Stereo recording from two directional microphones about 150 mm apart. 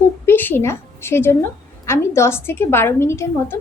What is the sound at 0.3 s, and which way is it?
A woman's voice, 15° left (ahead or behind).